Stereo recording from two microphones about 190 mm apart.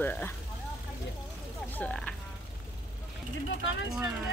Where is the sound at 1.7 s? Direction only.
5° left (ahead or behind).